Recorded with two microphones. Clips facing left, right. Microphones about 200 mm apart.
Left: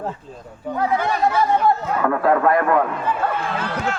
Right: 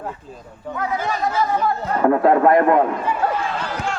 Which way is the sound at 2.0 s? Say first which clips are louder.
Right 7 dB; 25° right (ahead or behind).